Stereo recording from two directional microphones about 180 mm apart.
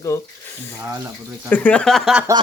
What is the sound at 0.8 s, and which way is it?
Speech, 15° right (ahead or behind).